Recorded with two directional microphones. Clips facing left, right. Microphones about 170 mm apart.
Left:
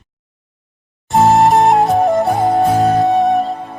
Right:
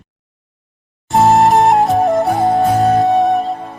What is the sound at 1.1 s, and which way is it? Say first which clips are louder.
Music: even; centre (ahead or behind).